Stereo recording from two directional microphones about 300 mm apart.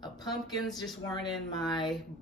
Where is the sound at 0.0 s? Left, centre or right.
Centre.